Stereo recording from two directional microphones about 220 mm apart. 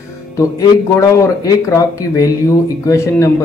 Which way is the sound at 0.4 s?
15° left (ahead or behind).